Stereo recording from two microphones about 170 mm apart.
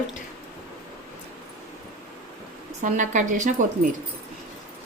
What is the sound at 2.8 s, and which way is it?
A woman's voice, 50° right (ahead or behind).